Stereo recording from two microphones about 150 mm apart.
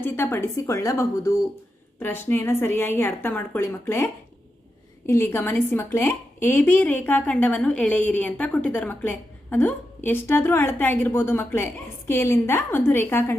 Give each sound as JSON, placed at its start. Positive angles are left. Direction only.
{"t": 0.0, "sound": "a woman's voice", "side_deg": 15}